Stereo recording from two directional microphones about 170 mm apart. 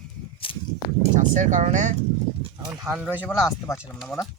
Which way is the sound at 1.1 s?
50° right (ahead or behind).